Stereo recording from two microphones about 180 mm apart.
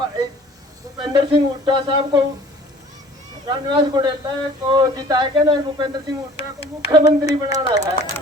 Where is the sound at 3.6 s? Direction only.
25° right (ahead or behind).